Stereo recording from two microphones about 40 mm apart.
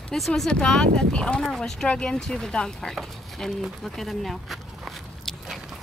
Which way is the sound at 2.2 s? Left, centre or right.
Centre.